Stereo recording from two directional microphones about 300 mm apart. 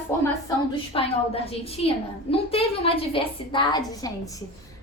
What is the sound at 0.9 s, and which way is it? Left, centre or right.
A woman's voice, centre.